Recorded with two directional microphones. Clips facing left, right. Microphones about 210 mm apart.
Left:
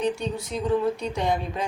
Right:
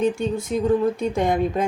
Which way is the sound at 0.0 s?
50° right (ahead or behind).